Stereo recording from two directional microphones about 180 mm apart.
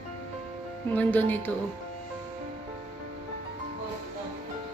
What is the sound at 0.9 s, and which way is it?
Speech, 10° left (ahead or behind).